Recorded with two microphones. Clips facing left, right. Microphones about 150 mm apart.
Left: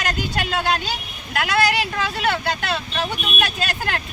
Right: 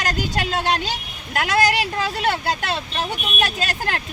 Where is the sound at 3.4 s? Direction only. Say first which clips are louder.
Right 1 dB; 40° right (ahead or behind).